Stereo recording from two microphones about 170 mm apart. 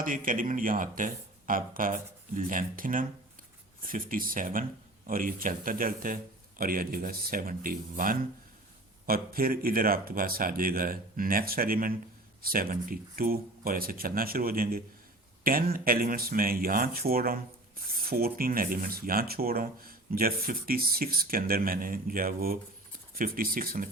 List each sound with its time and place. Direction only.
0.0 s speech: 50° right (ahead or behind)